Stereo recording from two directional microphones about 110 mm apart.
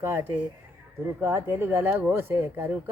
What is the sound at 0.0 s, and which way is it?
Speech, 25° right (ahead or behind).